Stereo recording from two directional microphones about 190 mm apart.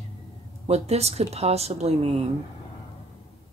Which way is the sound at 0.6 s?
35° right (ahead or behind).